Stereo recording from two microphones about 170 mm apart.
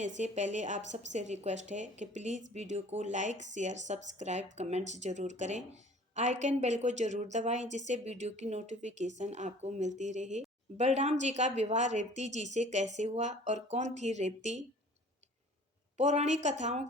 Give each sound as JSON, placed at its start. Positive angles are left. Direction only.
{"t": 0.2, "sound": "a woman's voice", "side_deg": -45}
{"t": 16.0, "sound": "a woman's voice", "side_deg": -40}